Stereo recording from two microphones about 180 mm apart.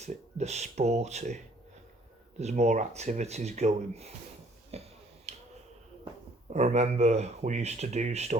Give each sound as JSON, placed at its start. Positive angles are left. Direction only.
{"t": 0.0, "sound": "speech", "side_deg": -40}
{"t": 2.4, "sound": "speech", "side_deg": -40}
{"t": 4.7, "sound": "finger snapping", "side_deg": -35}
{"t": 6.5, "sound": "speech", "side_deg": -40}